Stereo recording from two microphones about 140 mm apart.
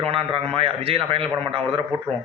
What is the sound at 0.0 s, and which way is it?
A man's voice, 40° right (ahead or behind).